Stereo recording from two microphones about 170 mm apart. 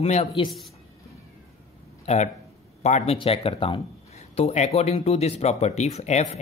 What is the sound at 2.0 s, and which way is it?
Speech, 45° left (ahead or behind).